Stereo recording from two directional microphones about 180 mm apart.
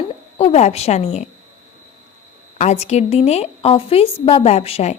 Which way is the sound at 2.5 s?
40° left (ahead or behind).